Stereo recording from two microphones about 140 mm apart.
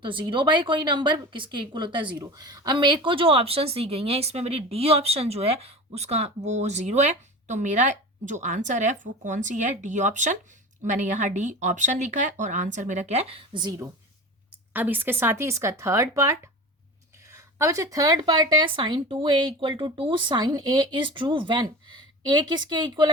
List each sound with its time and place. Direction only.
0.0 s a woman's voice: 35° right (ahead or behind)
14.7 s speech: 15° right (ahead or behind); by 23.0 s 35° right (ahead or behind)